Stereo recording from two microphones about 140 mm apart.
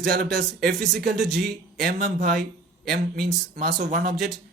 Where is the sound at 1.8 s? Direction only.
90° right.